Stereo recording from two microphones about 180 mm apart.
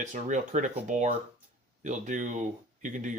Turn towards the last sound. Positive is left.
turn(degrees=-45)  # may be behind; listen again after turning